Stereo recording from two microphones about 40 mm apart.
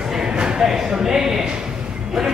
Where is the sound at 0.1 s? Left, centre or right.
Centre.